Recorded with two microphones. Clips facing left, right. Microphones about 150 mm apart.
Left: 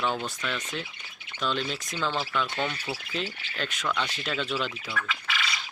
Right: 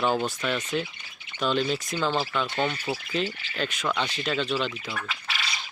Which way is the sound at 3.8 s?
25° right (ahead or behind).